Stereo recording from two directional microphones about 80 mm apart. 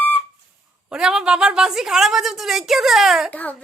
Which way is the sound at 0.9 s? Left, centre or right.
Centre.